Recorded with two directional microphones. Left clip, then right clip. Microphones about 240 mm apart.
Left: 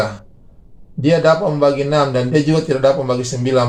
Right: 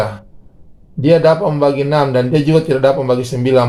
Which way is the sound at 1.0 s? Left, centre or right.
Right.